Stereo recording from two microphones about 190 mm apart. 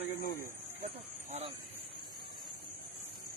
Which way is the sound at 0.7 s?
35° right (ahead or behind).